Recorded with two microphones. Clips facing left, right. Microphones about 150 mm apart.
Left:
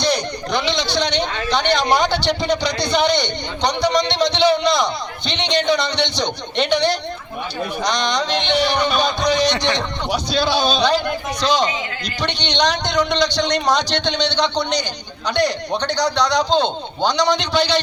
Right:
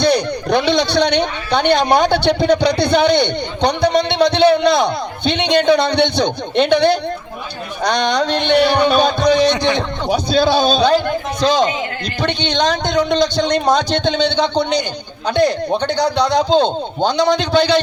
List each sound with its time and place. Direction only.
0.1 s a man's voice: 60° right (ahead or behind)